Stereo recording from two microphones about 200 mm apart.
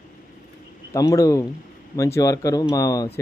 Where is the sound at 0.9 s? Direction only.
15° left (ahead or behind).